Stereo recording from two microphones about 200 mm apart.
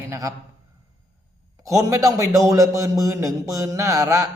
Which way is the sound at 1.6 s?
15° right (ahead or behind).